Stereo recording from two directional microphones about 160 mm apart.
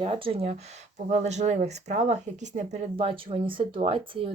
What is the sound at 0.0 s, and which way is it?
Speech, 35° right (ahead or behind).